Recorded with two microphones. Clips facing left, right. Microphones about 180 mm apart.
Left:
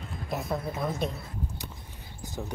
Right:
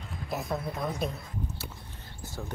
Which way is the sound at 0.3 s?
Centre (ahead or behind).